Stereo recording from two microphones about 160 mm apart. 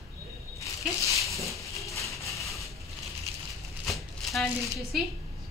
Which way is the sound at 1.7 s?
20° left (ahead or behind).